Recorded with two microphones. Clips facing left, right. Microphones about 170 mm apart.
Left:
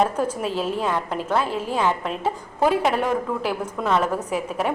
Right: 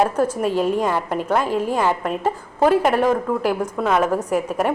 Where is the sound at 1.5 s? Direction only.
45° right (ahead or behind).